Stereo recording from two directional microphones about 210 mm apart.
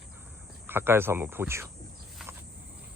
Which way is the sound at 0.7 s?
10° right (ahead or behind).